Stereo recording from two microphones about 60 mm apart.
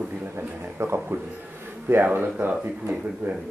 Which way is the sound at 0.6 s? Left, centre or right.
Right.